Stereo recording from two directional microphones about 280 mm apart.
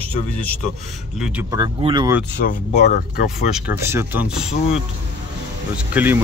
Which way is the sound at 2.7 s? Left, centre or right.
Left.